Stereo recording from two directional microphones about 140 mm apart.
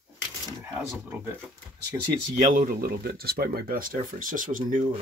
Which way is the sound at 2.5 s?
80° right.